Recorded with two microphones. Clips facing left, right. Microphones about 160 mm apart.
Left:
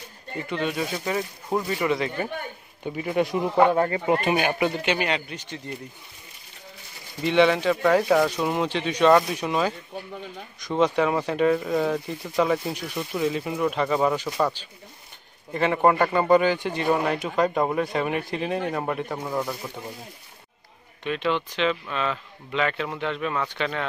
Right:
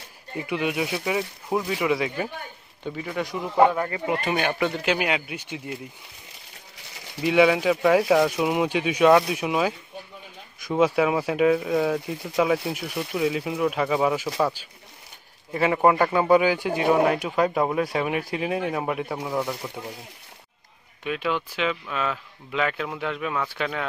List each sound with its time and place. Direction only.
0.4 s speech: 10° right (ahead or behind)
2.8 s speech: 20° left (ahead or behind)
3.7 s speech: 35° left (ahead or behind)
4.3 s speech: 10° left (ahead or behind)
4.7 s speech: 5° right (ahead or behind)
7.2 s speech: 5° right (ahead or behind)
21.0 s speech: 5° right (ahead or behind)